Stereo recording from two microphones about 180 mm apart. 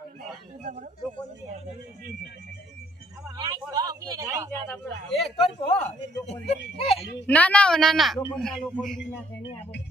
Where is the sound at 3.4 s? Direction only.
25° right (ahead or behind).